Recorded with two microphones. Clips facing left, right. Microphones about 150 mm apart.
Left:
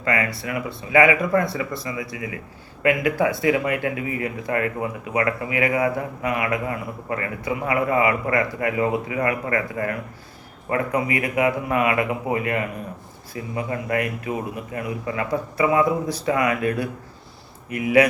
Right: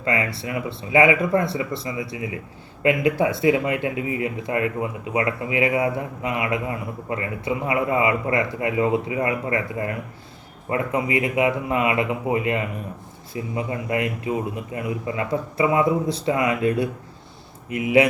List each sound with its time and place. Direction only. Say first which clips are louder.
0.0 s speech: even; 25° right (ahead or behind)